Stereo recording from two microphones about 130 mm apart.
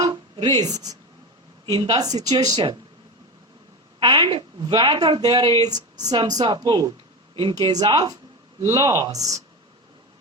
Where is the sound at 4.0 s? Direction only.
35° right (ahead or behind).